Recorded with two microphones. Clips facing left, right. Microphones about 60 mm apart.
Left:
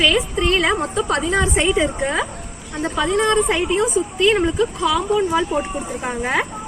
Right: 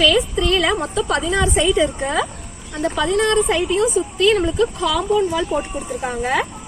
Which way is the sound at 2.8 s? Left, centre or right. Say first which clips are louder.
Right 1 dB; centre.